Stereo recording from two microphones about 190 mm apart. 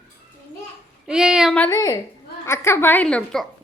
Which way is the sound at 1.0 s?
5° right (ahead or behind).